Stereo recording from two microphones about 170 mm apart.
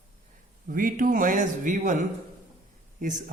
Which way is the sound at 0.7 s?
55° right (ahead or behind).